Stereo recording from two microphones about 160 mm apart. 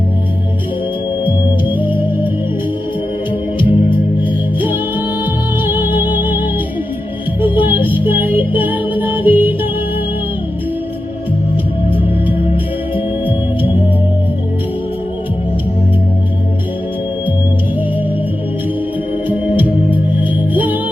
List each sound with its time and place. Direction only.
1.7 s music: 10° right (ahead or behind)
3.6 s music: 30° left (ahead or behind)
4.2 s music: 10° right (ahead or behind)
19.5 s organ: 10° right (ahead or behind)
20.5 s music: 10° right (ahead or behind)